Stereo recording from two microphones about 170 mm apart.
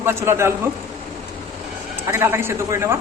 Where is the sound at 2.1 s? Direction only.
15° right (ahead or behind).